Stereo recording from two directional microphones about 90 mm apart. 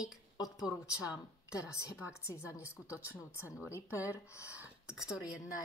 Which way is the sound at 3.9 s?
30° left (ahead or behind).